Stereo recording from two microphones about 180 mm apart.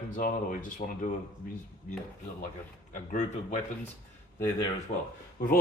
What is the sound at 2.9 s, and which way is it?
Speech, 45° left (ahead or behind).